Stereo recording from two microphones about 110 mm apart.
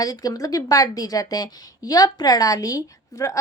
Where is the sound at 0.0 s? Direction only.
35° left (ahead or behind).